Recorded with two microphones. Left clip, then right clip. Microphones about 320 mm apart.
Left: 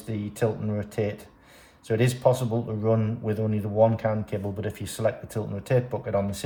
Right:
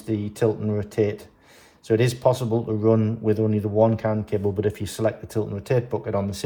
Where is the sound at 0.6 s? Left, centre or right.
Centre.